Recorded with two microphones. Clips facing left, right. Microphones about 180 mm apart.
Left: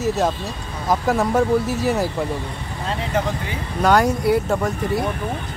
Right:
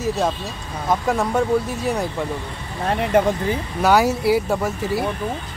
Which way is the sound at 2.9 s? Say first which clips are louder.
Right 6 dB; 60° right (ahead or behind).